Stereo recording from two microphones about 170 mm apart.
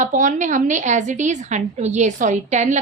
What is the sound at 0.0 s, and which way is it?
A woman's voice, 45° right (ahead or behind).